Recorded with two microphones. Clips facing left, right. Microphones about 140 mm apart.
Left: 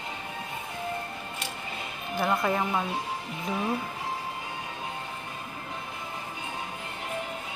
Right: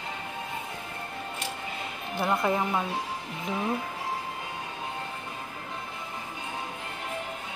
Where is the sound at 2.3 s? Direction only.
5° right (ahead or behind).